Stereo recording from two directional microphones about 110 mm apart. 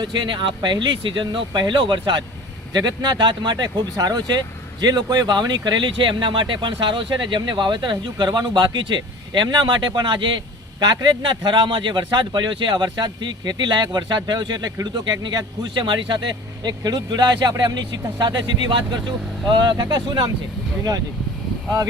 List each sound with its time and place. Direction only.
0.0 s speech: 45° right (ahead or behind)